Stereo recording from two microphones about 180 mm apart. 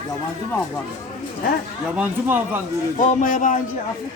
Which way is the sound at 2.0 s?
10° right (ahead or behind).